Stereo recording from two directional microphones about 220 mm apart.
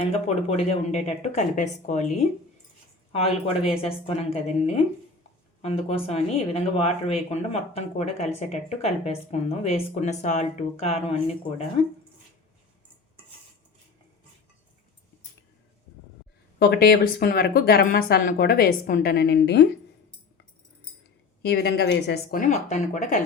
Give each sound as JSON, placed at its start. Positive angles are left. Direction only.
{"t": 0.0, "sound": "speech", "side_deg": 25}
{"t": 3.7, "sound": "speech", "side_deg": 25}
{"t": 16.6, "sound": "speech", "side_deg": 45}
{"t": 21.4, "sound": "speech", "side_deg": 45}